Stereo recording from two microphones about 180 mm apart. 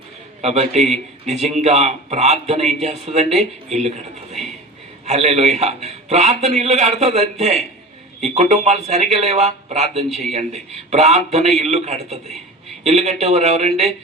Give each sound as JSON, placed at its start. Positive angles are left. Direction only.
{"t": 0.4, "sound": "a man's voice", "side_deg": -35}
{"t": 10.1, "sound": "a man's voice", "side_deg": 0}
{"t": 10.3, "sound": "a man's voice", "side_deg": -35}